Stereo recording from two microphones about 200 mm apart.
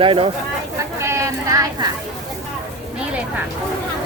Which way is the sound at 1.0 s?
15° right (ahead or behind).